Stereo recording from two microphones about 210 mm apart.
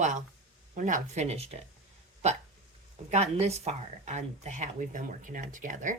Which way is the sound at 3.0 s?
30° right (ahead or behind).